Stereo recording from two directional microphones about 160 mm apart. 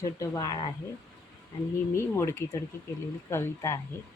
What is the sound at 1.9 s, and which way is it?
Speech, 15° left (ahead or behind).